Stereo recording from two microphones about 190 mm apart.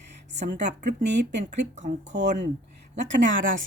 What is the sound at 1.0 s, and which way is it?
Speech, 65° right (ahead or behind).